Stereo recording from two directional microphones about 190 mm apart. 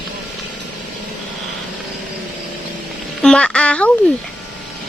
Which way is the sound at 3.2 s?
5° left (ahead or behind).